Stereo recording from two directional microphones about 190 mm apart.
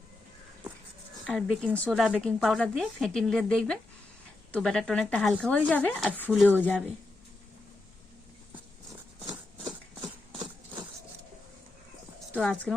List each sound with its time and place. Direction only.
1.3 s speech: 5° left (ahead or behind)
9.2 s horse: 20° right (ahead or behind)
12.3 s speech: 5° left (ahead or behind)